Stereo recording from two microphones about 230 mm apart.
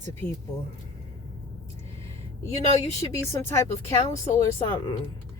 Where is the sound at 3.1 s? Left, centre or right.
Centre.